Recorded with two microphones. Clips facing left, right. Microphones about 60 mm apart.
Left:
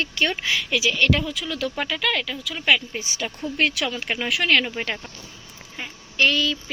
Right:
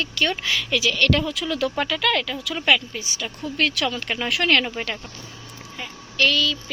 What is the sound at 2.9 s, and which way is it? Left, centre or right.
Speech, left.